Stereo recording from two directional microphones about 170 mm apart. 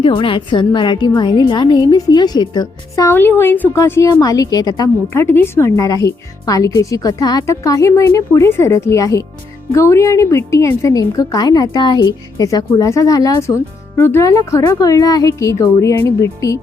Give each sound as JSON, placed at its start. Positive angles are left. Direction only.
{"t": 0.0, "sound": "a woman's voice", "side_deg": 30}